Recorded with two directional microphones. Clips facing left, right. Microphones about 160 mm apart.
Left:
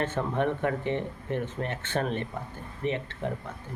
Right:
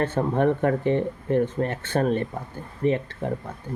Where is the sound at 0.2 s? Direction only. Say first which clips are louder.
Right 7 dB; 45° right (ahead or behind).